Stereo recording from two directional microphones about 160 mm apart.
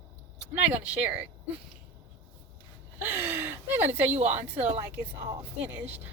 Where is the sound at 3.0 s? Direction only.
10° right (ahead or behind).